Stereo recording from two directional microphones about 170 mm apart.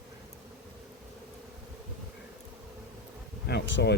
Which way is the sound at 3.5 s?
80° left.